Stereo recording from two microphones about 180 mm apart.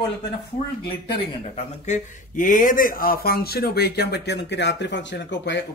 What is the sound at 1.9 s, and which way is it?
Speech, 45° left (ahead or behind).